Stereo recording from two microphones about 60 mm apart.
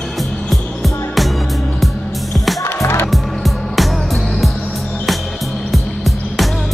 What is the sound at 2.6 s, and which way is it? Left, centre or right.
Music, left.